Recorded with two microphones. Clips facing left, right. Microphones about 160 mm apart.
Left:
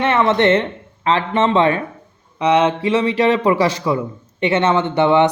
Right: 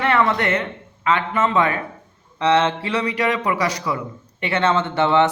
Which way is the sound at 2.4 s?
15° left (ahead or behind).